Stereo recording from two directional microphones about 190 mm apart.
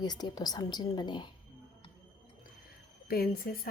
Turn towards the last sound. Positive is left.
turn(degrees=50)  # may be behind; listen again after turning